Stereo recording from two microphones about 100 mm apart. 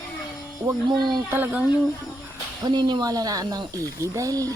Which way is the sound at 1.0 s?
45° right (ahead or behind).